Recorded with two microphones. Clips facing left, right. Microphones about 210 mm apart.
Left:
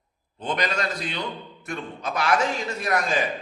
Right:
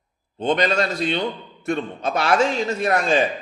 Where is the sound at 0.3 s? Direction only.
25° right (ahead or behind).